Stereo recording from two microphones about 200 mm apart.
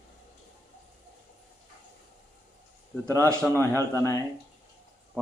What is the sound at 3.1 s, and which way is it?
A man's voice, 10° left (ahead or behind).